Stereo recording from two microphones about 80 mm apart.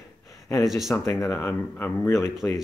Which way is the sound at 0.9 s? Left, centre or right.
Left.